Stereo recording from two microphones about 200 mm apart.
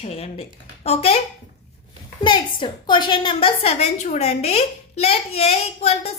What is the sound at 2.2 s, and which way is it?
A woman's voice, 25° left (ahead or behind).